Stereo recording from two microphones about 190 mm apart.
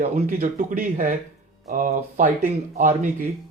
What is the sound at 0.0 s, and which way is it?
Speech, 45° right (ahead or behind).